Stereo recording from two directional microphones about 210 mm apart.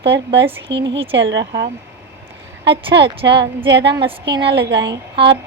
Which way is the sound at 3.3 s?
55° right (ahead or behind).